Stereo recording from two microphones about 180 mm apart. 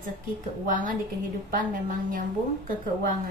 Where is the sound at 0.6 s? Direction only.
50° right (ahead or behind).